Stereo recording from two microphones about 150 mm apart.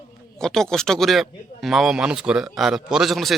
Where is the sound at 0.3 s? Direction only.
5° left (ahead or behind).